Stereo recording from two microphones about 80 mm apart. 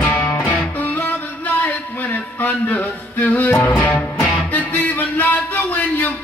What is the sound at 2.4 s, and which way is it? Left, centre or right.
Music, left.